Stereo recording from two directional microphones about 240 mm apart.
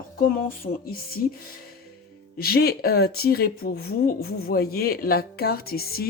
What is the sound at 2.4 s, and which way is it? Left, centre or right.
Speech, left.